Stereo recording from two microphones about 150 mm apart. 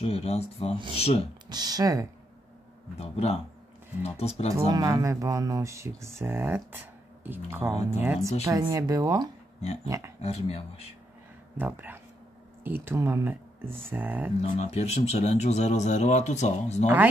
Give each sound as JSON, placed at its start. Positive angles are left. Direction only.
{"t": 0.0, "sound": "speech", "side_deg": 40}
{"t": 1.5, "sound": "speech", "side_deg": -25}
{"t": 3.0, "sound": "speech", "side_deg": 45}
{"t": 4.6, "sound": "speech", "side_deg": -25}
{"t": 10.2, "sound": "speech", "side_deg": 45}
{"t": 11.5, "sound": "speech", "side_deg": -15}
{"t": 14.4, "sound": "speech", "side_deg": 45}